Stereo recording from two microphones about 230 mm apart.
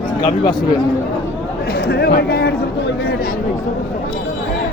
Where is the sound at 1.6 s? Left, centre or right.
Left.